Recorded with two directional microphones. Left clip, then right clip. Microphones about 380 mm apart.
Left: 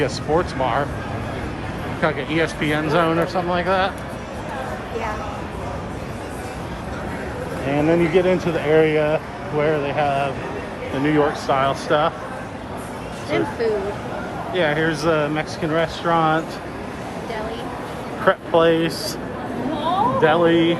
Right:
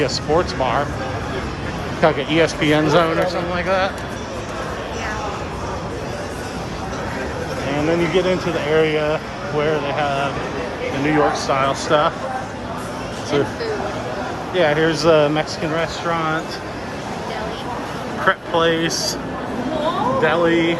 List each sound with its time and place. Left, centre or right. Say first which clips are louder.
0.0 s speech: right 2 dB; centre
2.0 s speech: right 5 dB; centre
7.7 s speech: left 1 dB; centre
14.5 s speech: right 3 dB; centre
18.3 s speech: left 1 dB; centre
20.2 s speech: even; centre